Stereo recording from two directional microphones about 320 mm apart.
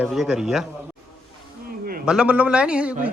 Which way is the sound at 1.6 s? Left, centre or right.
Right.